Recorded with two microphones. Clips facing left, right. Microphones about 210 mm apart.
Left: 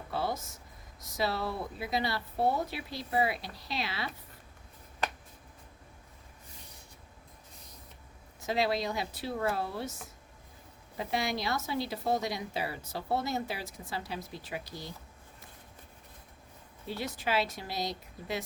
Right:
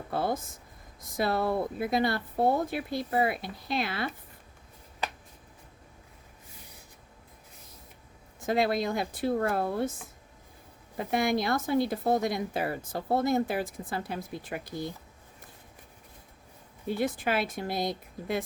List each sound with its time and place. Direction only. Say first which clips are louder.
0.1 s a sound: right 4 dB; 50° right (ahead or behind)
1.0 s speech: right 5 dB; 50° right (ahead or behind)
8.4 s speech: right 4 dB; 50° right (ahead or behind)
10.9 s speech: right 6 dB; 50° right (ahead or behind)
17.0 s speech: right 3 dB; 50° right (ahead or behind)